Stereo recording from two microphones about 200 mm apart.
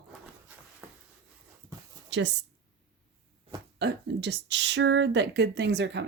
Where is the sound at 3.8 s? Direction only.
60° right (ahead or behind).